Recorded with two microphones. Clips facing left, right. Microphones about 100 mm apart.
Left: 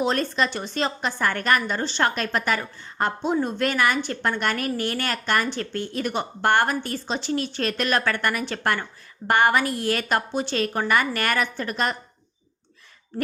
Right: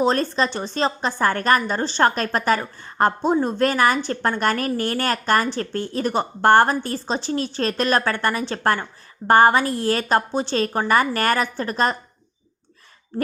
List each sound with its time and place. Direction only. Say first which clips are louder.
0.0 s a woman's voice: right 3 dB; 35° right (ahead or behind)